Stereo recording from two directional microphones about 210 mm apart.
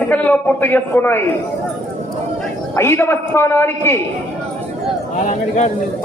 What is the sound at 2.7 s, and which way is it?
A man's voice, 10° left (ahead or behind).